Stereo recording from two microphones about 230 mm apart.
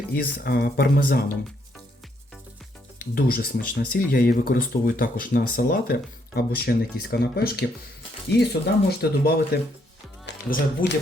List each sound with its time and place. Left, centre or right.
0.1 s speech: left
3.0 s speech: left